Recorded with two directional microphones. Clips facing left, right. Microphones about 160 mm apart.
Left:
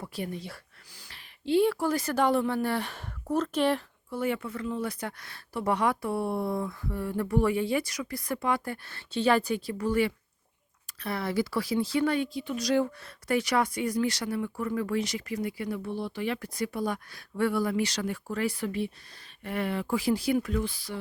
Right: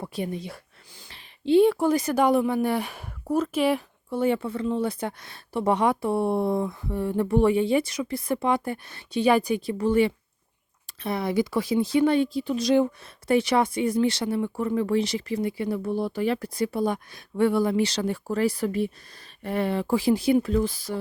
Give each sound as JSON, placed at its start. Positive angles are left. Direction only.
{"t": 0.0, "sound": "a woman's voice", "side_deg": -20}
{"t": 4.1, "sound": "speech", "side_deg": -25}
{"t": 12.6, "sound": "speech", "side_deg": -20}
{"t": 15.8, "sound": "speech", "side_deg": -45}